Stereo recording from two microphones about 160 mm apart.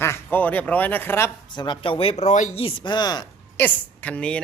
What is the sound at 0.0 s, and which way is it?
Speech, 15° left (ahead or behind).